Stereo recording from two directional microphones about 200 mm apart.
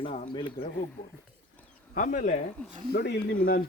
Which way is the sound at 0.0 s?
25° left (ahead or behind).